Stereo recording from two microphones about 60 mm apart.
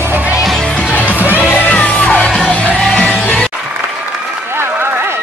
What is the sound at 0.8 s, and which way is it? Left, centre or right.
Music, left.